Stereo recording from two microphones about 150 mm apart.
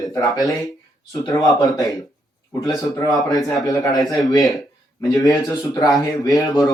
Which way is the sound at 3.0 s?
25° left (ahead or behind).